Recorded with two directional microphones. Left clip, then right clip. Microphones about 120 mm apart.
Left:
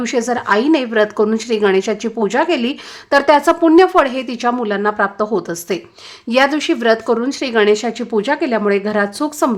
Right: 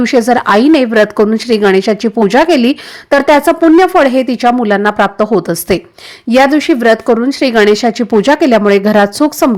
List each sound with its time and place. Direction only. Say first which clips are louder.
0.0 s a woman's voice: right 9 dB; 45° right (ahead or behind)
6.3 s a woman's voice: right 6 dB; 40° right (ahead or behind)